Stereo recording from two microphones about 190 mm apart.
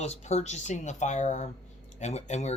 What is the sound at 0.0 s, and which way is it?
Speech, 35° left (ahead or behind).